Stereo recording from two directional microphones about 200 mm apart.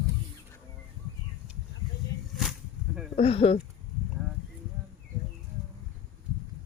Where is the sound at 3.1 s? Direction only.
30° left (ahead or behind).